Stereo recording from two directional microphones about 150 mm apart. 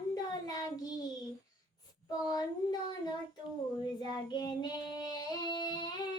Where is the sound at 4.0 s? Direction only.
30° left (ahead or behind).